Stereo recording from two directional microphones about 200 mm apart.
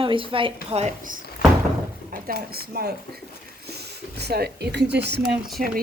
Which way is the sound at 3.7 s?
55° right (ahead or behind).